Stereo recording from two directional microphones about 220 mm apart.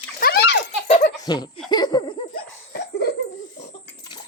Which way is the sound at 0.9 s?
35° left (ahead or behind).